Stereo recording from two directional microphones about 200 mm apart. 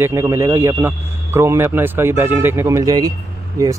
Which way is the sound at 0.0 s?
15° right (ahead or behind).